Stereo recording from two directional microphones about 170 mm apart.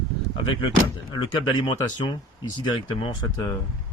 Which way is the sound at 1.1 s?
30° left (ahead or behind).